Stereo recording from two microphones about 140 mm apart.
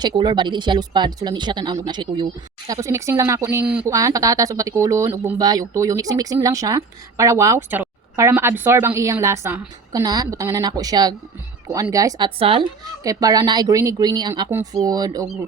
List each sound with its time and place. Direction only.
0.2 s speech: 35° right (ahead or behind)
2.6 s speech: 20° right (ahead or behind)
12.4 s speech: 40° right (ahead or behind)
13.0 s speech: 25° right (ahead or behind)